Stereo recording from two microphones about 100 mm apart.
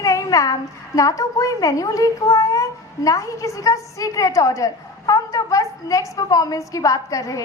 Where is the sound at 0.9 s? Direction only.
35° left (ahead or behind).